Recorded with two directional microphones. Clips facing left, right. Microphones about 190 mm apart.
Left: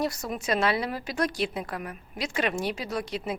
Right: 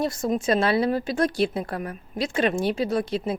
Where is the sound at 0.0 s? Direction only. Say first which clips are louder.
Right 6 dB; 25° right (ahead or behind).